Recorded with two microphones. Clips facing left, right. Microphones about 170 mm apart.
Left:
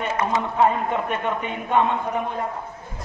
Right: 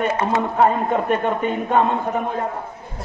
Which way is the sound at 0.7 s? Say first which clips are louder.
Right 4 dB; 40° right (ahead or behind).